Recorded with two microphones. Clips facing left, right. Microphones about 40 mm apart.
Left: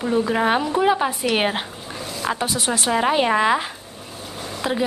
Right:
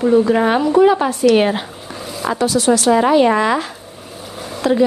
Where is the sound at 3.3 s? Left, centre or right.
Centre.